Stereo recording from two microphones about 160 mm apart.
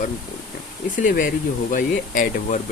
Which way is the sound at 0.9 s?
55° left (ahead or behind).